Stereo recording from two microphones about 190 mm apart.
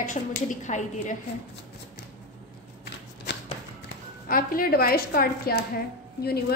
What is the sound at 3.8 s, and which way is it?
A woman's voice, 50° left (ahead or behind).